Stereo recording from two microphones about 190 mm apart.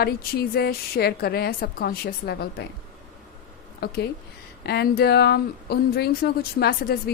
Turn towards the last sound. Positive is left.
turn(degrees=55)  # may be behind; listen again after turning